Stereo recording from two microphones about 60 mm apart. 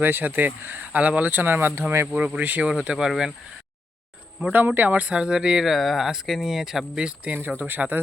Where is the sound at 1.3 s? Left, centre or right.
Right.